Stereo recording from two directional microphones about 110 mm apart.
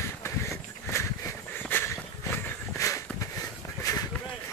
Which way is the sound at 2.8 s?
30° left (ahead or behind).